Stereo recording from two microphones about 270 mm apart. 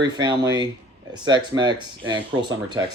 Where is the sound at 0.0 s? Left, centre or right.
Centre.